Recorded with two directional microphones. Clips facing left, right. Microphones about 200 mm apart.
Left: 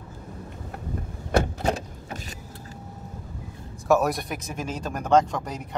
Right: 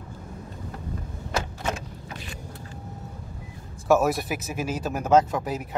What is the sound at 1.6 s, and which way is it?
Vehicle, 35° left (ahead or behind).